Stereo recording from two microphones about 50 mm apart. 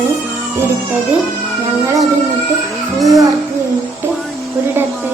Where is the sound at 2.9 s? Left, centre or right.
Centre.